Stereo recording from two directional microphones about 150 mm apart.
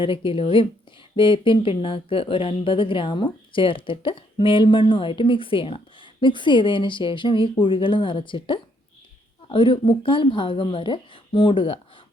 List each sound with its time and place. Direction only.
0.0 s speech: 35° left (ahead or behind)